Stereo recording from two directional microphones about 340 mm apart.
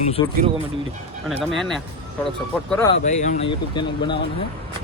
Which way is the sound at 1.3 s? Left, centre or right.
Centre.